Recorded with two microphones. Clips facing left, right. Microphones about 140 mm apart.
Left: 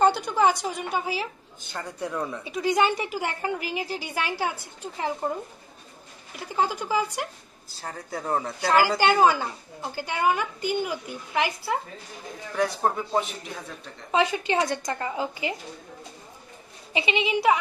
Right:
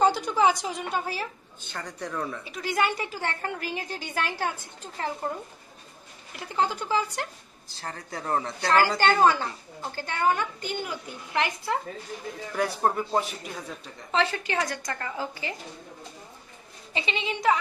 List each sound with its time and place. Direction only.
0.0 s a woman's voice: centre (ahead or behind)
6.3 s a woman's voice: 5° left (ahead or behind)
14.1 s a woman's voice: 15° left (ahead or behind)
16.9 s speech: 15° left (ahead or behind)